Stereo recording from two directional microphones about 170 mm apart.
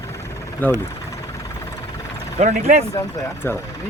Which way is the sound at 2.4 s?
45° right (ahead or behind).